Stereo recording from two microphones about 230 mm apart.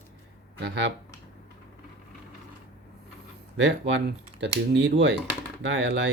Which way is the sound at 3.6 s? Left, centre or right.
Right.